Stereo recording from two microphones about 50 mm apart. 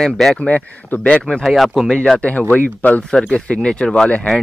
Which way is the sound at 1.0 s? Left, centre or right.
Left.